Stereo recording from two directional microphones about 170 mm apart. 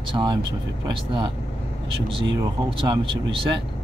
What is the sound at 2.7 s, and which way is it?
Speech, 30° right (ahead or behind).